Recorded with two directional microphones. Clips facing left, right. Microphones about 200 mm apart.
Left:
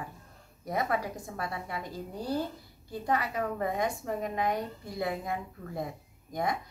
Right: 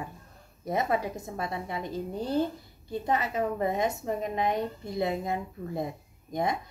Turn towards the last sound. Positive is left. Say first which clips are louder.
# right 2 dB
turn(degrees=-25)  # may be behind; listen again after turning